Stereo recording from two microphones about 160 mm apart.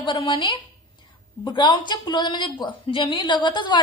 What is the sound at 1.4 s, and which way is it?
Speech, 30° left (ahead or behind).